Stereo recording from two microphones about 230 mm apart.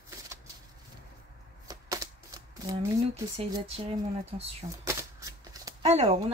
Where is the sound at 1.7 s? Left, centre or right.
Centre.